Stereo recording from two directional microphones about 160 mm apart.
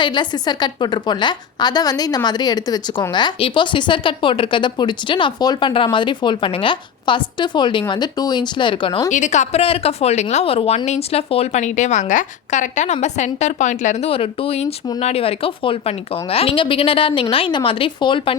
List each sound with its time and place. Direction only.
0.0 s a woman's voice: 30° left (ahead or behind)
9.0 s a woman's voice: 50° left (ahead or behind); by 18.3 s 30° left (ahead or behind)